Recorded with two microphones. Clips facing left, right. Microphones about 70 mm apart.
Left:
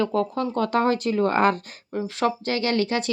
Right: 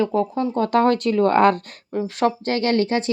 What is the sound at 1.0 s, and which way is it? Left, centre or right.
Speech, right.